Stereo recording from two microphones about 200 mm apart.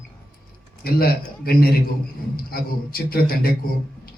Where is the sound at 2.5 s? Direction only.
50° left (ahead or behind).